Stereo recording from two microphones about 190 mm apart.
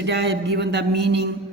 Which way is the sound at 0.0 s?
65° right (ahead or behind).